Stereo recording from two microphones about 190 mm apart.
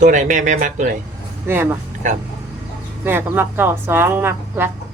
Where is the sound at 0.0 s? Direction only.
40° right (ahead or behind).